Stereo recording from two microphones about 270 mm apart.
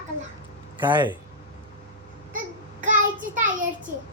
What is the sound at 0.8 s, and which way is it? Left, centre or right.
Speech, centre.